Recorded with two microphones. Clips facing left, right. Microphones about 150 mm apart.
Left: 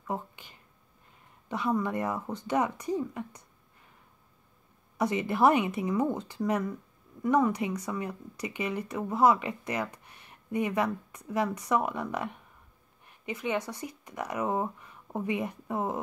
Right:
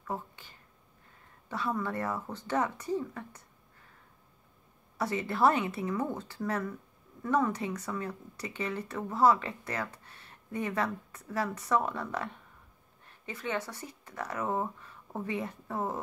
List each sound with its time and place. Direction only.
0.0 s a woman's voice: 15° left (ahead or behind)
4.9 s speech: 15° left (ahead or behind)